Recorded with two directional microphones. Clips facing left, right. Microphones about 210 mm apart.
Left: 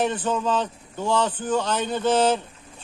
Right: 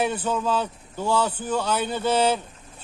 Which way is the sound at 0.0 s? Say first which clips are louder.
Left 1 dB; 10° right (ahead or behind).